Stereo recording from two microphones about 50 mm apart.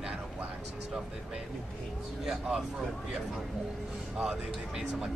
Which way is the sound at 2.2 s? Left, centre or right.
Centre.